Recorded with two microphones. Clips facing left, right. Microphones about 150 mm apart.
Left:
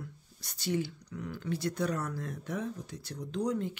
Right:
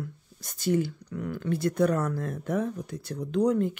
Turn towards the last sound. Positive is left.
turn(degrees=-55)  # may be behind; listen again after turning